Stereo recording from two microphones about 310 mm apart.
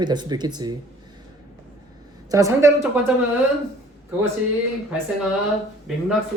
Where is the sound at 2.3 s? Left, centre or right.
Centre.